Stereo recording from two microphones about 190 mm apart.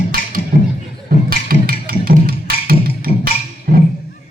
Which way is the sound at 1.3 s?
50° right (ahead or behind).